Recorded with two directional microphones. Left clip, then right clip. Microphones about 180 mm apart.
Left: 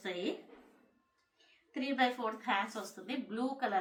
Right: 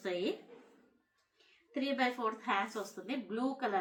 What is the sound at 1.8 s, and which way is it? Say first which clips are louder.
A woman's voice: left 1 dB; 20° left (ahead or behind).